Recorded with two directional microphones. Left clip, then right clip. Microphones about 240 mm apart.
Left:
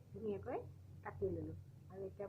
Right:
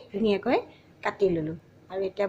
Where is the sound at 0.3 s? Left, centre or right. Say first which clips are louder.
Right 19 dB; right.